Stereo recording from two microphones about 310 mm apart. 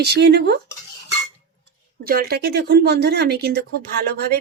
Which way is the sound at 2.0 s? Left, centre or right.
Right.